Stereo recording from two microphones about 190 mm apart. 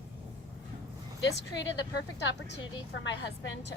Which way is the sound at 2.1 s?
65° left (ahead or behind).